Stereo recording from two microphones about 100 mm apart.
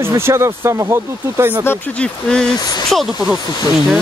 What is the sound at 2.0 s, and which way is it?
Speech, 10° left (ahead or behind).